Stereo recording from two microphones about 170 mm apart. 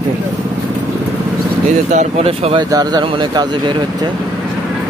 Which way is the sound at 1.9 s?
35° right (ahead or behind).